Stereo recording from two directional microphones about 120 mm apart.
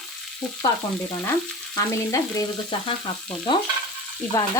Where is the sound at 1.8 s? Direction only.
30° left (ahead or behind).